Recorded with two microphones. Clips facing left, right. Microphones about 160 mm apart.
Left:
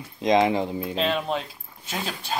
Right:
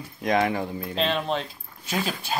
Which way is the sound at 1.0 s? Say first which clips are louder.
Right 1 dB; 5° left (ahead or behind).